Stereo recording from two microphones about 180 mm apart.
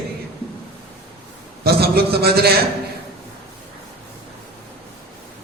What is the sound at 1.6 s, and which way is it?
Speech, 60° right (ahead or behind).